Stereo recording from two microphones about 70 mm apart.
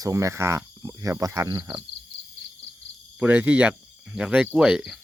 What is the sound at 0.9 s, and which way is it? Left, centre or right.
Cricket, right.